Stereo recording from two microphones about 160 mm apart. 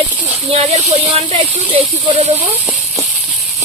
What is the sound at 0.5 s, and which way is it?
Speech, 40° right (ahead or behind).